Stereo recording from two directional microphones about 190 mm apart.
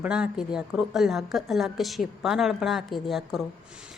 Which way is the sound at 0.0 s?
5° right (ahead or behind).